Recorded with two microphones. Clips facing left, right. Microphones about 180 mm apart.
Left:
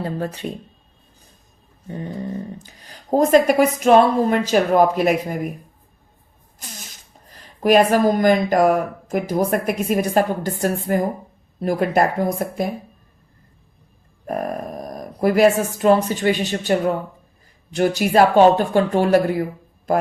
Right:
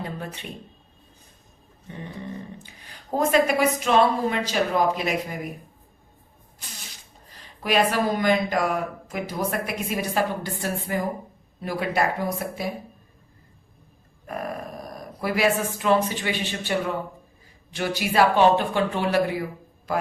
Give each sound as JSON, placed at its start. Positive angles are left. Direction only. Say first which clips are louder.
{"t": 0.0, "sound": "speech", "louder": "left 8 dB", "side_deg": 40}
{"t": 2.6, "sound": "speech", "louder": "left 9 dB", "side_deg": 40}
{"t": 6.6, "sound": "a sound", "louder": "left 5 dB", "side_deg": 45}
{"t": 7.3, "sound": "speech", "louder": "left 8 dB", "side_deg": 45}
{"t": 14.3, "sound": "speech", "louder": "left 6 dB", "side_deg": 45}
{"t": 17.7, "sound": "speech", "louder": "left 6 dB", "side_deg": 45}